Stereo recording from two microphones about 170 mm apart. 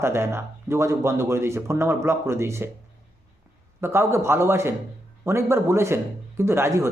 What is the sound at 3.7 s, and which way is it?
Speech, 15° right (ahead or behind).